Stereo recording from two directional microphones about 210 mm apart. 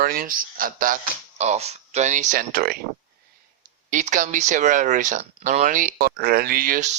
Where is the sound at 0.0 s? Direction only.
45° right (ahead or behind).